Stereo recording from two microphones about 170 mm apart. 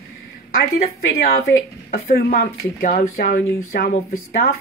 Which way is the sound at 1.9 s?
60° left (ahead or behind).